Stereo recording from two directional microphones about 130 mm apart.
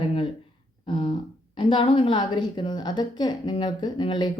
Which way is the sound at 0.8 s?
45° left (ahead or behind).